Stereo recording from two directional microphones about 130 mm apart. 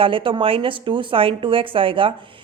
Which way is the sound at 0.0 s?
40° right (ahead or behind).